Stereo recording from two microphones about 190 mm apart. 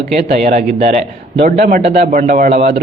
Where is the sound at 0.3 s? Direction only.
40° right (ahead or behind).